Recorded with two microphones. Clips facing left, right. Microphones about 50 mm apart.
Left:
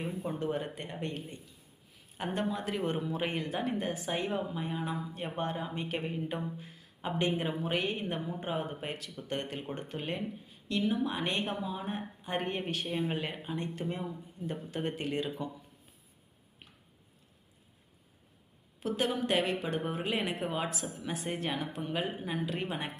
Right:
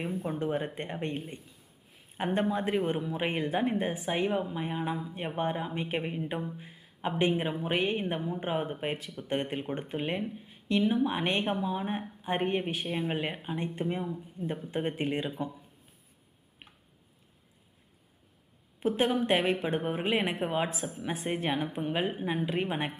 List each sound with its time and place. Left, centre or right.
0.0 s speech: right
2.8 s speech: centre
3.2 s speech: right
4.6 s speech: right
6.6 s a sound: right
7.2 s speech: centre
14.0 s speech: centre
14.7 s speech: right
18.8 s speech: right